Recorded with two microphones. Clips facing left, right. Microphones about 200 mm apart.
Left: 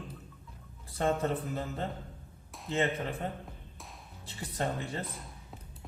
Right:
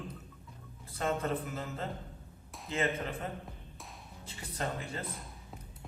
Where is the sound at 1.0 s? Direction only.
30° left (ahead or behind).